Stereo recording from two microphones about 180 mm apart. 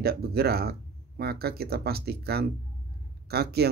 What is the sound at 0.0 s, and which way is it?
Speech, 60° right (ahead or behind).